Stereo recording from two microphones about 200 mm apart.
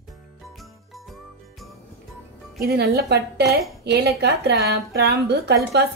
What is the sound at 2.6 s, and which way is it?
A woman's voice, 50° right (ahead or behind).